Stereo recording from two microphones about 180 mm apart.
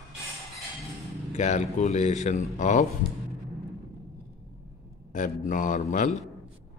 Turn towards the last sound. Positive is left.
turn(degrees=45)  # may be behind; listen again after turning